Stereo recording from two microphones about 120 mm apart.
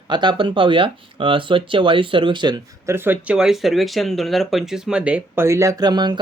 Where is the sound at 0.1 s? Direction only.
40° right (ahead or behind).